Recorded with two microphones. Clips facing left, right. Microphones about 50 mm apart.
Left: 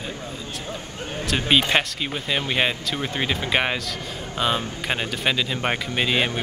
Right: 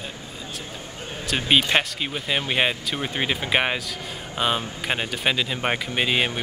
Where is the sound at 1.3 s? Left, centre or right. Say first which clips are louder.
Even; centre.